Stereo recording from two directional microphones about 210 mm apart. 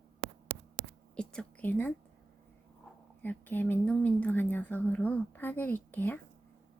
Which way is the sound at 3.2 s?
10° left (ahead or behind).